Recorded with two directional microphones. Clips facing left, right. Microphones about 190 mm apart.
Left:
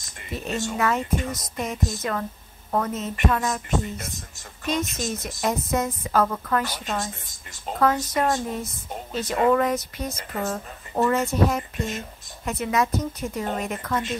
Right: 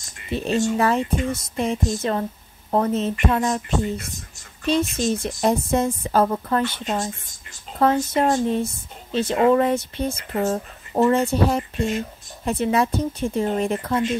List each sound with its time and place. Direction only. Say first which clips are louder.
0.3 s speech: right 7 dB; 30° right (ahead or behind)
4.6 s speech: right 6 dB; 30° right (ahead or behind)